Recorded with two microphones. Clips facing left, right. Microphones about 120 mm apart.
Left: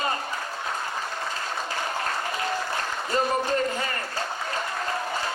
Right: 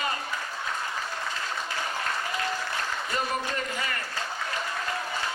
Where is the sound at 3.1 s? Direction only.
35° left (ahead or behind).